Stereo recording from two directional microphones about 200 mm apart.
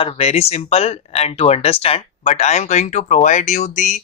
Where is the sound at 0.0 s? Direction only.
30° left (ahead or behind).